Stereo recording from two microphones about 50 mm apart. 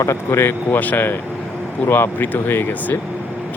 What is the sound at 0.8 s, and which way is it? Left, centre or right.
Speech, left.